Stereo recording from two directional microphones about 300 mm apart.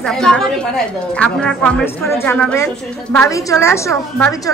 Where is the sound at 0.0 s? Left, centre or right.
Centre.